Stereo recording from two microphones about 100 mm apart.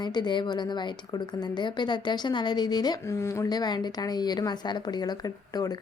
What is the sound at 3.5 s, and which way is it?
A woman's voice, 45° left (ahead or behind).